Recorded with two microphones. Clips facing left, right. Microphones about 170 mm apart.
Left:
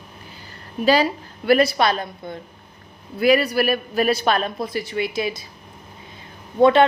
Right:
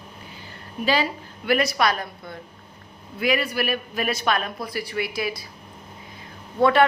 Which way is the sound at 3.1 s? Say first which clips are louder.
Left 6 dB; 35° left (ahead or behind).